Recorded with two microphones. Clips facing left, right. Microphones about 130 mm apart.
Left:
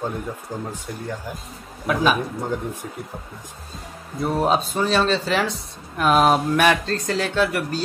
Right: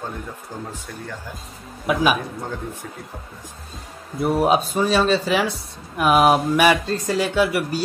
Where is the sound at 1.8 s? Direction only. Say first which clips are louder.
Right 1 dB; 10° right (ahead or behind).